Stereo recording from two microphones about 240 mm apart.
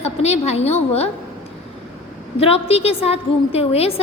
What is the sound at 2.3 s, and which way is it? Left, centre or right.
A woman's voice, left.